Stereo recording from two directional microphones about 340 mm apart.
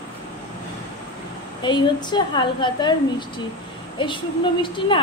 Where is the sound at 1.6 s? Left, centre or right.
Centre.